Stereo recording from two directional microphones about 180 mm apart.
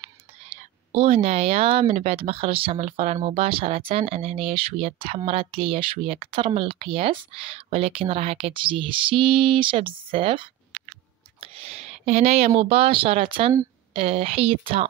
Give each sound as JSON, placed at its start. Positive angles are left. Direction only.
{"t": 0.5, "sound": "speech", "side_deg": -30}